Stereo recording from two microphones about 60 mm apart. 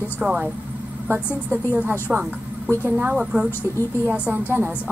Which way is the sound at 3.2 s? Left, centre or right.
Centre.